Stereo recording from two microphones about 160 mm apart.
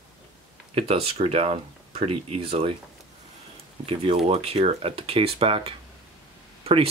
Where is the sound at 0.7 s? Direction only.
40° right (ahead or behind).